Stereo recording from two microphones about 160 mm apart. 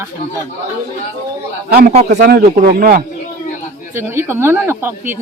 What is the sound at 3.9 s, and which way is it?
Speech, 15° right (ahead or behind).